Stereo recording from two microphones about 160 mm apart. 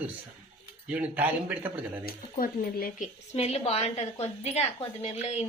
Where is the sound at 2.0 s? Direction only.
65° left (ahead or behind).